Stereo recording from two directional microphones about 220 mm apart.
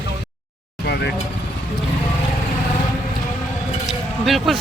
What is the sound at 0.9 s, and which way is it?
Vehicle, 50° left (ahead or behind).